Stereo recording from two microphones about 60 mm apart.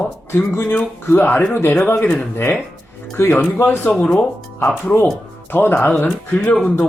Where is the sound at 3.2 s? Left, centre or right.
Left.